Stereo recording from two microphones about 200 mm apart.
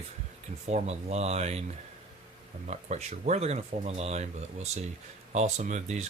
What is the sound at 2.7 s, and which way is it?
Speech, 35° right (ahead or behind).